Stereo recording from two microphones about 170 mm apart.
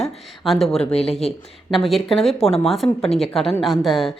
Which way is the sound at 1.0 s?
35° left (ahead or behind).